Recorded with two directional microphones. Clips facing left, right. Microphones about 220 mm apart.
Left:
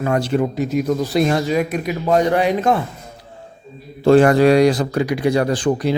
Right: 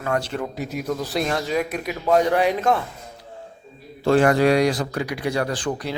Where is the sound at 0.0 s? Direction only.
15° left (ahead or behind).